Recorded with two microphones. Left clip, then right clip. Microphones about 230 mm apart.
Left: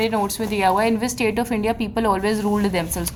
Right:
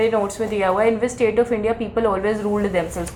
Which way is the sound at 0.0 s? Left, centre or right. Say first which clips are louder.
Right 3 dB; left.